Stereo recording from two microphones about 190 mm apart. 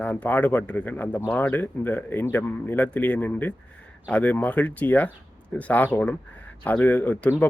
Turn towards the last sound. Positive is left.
turn(degrees=10)  # may be behind; listen again after turning